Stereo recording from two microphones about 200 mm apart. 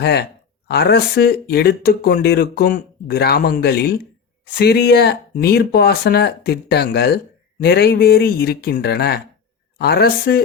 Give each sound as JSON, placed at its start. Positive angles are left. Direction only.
{"t": 0.0, "sound": "speech", "side_deg": 55}